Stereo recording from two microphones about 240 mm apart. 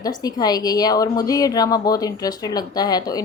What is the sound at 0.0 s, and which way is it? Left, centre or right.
Speech, centre.